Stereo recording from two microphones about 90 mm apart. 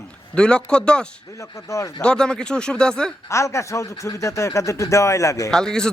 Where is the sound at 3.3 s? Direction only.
35° left (ahead or behind).